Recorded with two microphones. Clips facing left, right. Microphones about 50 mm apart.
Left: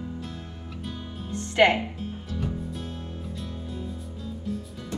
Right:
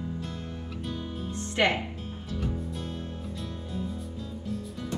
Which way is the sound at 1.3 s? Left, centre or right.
Left.